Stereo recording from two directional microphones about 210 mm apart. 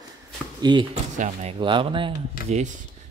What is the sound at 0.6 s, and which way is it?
Speech, 20° right (ahead or behind).